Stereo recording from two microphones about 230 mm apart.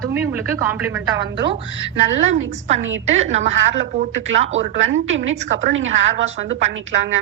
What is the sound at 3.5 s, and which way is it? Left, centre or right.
A woman's voice, right.